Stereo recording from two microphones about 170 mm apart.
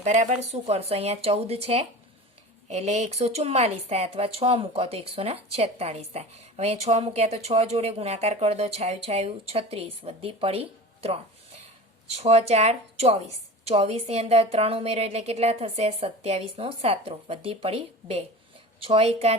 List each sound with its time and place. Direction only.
0.0 s speech: 45° right (ahead or behind)